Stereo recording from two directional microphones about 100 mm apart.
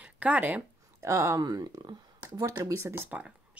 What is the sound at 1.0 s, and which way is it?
Speech, 30° right (ahead or behind).